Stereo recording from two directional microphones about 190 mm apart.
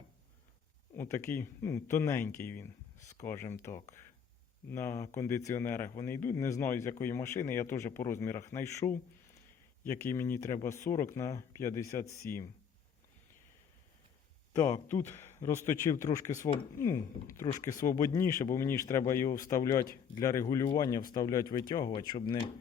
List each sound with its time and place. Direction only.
0.9 s a man's voice: 15° left (ahead or behind)
14.5 s a man's voice: 15° left (ahead or behind)